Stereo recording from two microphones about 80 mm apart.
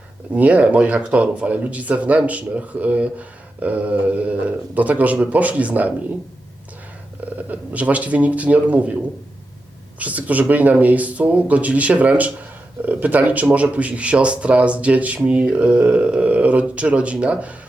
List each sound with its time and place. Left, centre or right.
0.3 s a man's voice: centre
7.3 s a man's voice: centre